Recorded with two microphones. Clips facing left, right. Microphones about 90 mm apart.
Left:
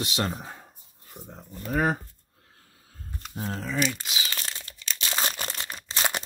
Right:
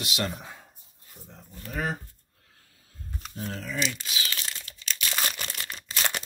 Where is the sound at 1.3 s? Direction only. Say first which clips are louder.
Left 8 dB; 40° left (ahead or behind).